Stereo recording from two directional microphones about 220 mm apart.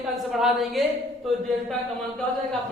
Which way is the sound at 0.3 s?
Centre (ahead or behind).